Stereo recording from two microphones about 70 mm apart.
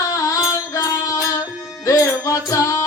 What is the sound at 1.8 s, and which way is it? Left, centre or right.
Music, left.